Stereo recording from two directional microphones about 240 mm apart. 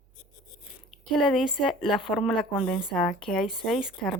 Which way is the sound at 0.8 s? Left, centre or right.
Centre.